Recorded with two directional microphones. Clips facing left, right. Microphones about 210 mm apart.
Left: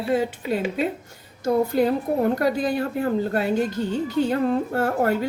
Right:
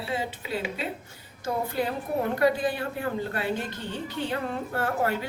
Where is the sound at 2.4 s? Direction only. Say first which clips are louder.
Left 2 dB; 45° left (ahead or behind).